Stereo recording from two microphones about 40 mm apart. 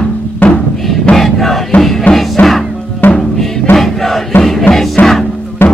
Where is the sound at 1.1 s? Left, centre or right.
Centre.